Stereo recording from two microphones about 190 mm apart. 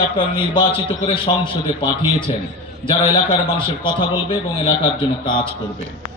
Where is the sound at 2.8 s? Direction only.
25° left (ahead or behind).